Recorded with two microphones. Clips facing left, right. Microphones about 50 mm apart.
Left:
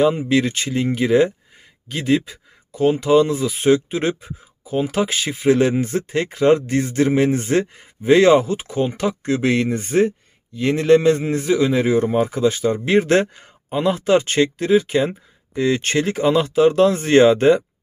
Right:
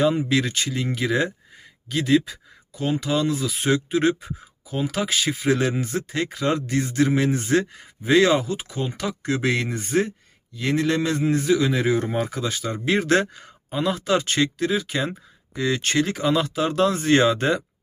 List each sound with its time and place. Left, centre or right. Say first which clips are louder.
0.3 s speech: left 4 dB; centre
9.3 s speech: left 4 dB; centre